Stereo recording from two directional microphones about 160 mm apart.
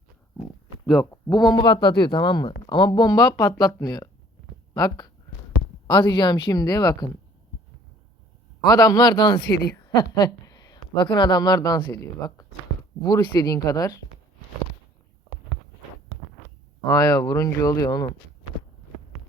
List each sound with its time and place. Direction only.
1.1 s speech: 25° left (ahead or behind)
8.6 s speech: 25° left (ahead or behind)
16.8 s speech: 20° left (ahead or behind)